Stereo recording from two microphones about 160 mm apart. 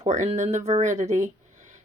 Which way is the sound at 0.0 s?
45° right (ahead or behind).